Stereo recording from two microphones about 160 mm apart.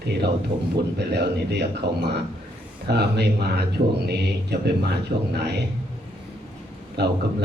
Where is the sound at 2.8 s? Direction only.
90° right.